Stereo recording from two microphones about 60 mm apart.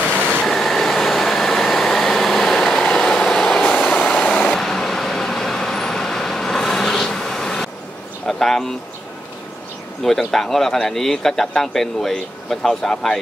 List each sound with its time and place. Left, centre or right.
0.1 s vehicle: centre
0.5 s vehicle: centre
3.8 s vehicle: centre
4.6 s vehicle: centre
8.3 s a sound: centre
10.0 s a man's voice: centre